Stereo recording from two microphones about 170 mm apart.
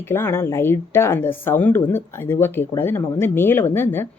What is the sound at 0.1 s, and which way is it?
Speech, 15° left (ahead or behind).